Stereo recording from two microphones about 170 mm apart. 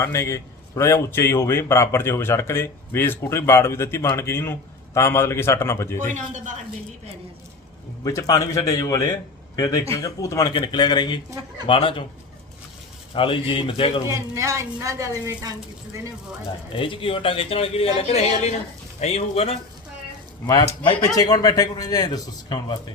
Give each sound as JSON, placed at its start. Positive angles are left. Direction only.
{"t": 0.0, "sound": "a man's voice", "side_deg": 15}
{"t": 6.1, "sound": "a man's voice", "side_deg": -45}
{"t": 8.0, "sound": "a man's voice", "side_deg": 20}
{"t": 13.1, "sound": "a man's voice", "side_deg": 30}
{"t": 14.1, "sound": "a woman's voice", "side_deg": -20}
{"t": 16.7, "sound": "a man's voice", "side_deg": 30}
{"t": 20.8, "sound": "speech", "side_deg": 30}